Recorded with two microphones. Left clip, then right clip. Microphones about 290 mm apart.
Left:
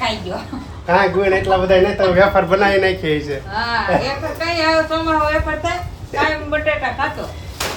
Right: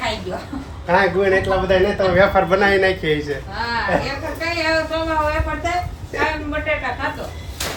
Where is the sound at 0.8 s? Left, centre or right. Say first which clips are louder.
Left 2 dB; centre.